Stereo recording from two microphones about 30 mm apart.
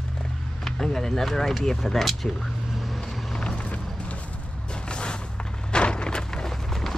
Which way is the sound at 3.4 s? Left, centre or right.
Left.